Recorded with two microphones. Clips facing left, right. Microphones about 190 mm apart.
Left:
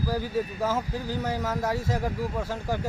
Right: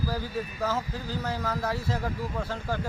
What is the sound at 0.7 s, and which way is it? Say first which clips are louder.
Speech: left 3 dB; 15° left (ahead or behind).